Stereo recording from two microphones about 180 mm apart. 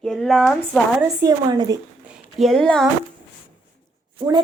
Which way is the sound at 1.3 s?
20° right (ahead or behind).